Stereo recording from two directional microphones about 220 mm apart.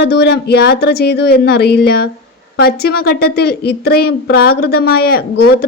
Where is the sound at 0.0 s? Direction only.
45° left (ahead or behind).